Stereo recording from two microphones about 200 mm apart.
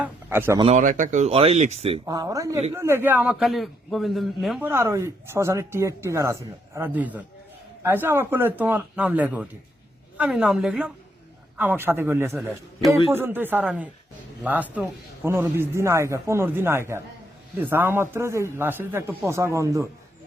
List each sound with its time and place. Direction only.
0.0 s a sound: 10° right (ahead or behind)
0.6 s speech: 35° right (ahead or behind)
2.0 s a man's voice: 15° right (ahead or behind); by 4.7 s centre (ahead or behind)
4.7 s a man's voice: 15° right (ahead or behind)